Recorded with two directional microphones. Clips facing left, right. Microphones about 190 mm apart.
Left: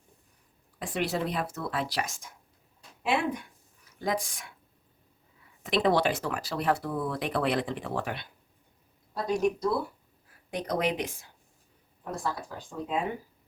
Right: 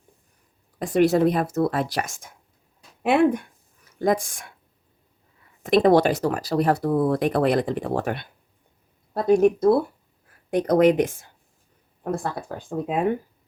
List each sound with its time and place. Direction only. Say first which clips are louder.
0.8 s speech: right 12 dB; 45° right (ahead or behind)
5.6 s speech: right 8 dB; 45° right (ahead or behind)